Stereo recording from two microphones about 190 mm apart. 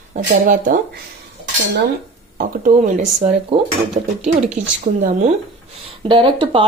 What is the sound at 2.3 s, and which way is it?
Speech, 45° right (ahead or behind).